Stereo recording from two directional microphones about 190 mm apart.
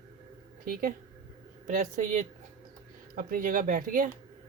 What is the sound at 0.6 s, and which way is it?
Speech, 50° right (ahead or behind).